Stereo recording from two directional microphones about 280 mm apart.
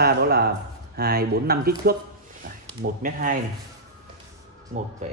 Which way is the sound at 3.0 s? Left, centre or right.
Right.